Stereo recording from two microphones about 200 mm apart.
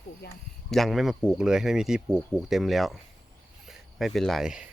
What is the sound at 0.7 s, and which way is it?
Speech, centre (ahead or behind).